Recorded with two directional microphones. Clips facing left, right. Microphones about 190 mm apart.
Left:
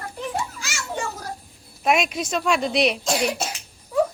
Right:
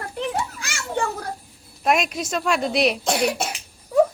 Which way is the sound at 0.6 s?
55° right (ahead or behind).